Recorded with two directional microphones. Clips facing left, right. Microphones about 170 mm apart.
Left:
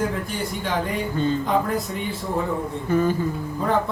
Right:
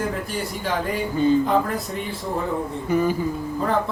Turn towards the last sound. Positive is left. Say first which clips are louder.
# even
turn(degrees=-10)  # may be behind; listen again after turning